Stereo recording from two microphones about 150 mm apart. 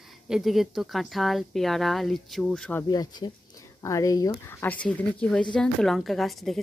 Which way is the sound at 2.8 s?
25° left (ahead or behind).